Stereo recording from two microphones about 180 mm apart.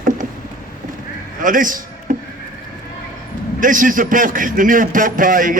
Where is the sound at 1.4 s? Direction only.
45° right (ahead or behind).